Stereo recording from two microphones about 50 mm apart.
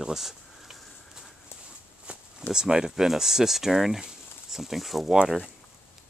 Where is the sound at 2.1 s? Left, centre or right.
Right.